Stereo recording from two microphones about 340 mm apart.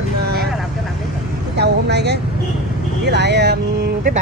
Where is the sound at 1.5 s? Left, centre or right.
Right.